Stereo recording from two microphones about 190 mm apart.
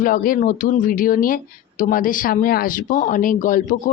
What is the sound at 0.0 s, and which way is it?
Speech, 45° left (ahead or behind).